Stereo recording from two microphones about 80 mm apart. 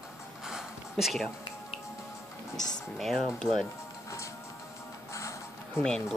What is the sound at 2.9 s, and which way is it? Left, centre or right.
Speech, centre.